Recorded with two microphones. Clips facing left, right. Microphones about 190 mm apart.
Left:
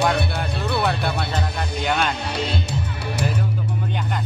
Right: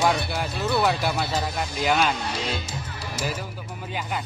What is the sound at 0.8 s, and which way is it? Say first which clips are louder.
Speech: even; 5° right (ahead or behind).